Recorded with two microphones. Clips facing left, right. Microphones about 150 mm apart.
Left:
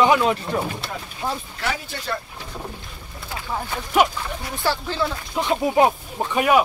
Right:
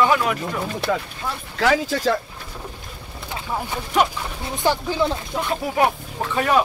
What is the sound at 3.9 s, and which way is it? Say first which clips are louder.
Speech: left 1 dB; 5° left (ahead or behind).